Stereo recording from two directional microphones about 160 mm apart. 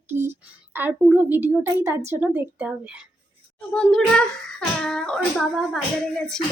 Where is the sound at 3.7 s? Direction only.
5° left (ahead or behind).